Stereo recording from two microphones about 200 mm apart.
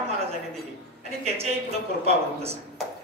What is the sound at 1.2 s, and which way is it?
Speech, 30° right (ahead or behind).